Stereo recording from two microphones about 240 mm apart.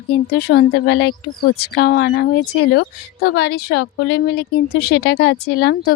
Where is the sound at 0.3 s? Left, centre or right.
Left.